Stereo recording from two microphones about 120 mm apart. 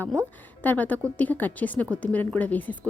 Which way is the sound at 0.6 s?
15° left (ahead or behind).